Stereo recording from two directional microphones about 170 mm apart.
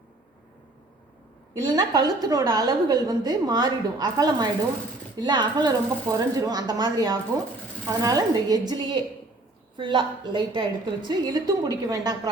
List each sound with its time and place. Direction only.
1.5 s a woman's voice: 25° right (ahead or behind)